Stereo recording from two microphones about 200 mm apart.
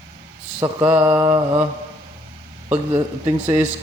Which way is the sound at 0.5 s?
15° right (ahead or behind).